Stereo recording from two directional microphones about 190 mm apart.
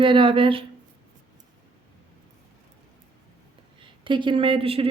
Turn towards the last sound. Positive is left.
turn(degrees=-30)  # may be behind; listen again after turning